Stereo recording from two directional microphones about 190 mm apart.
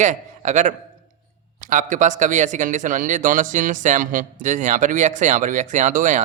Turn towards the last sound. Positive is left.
turn(degrees=-40)  # may be behind; listen again after turning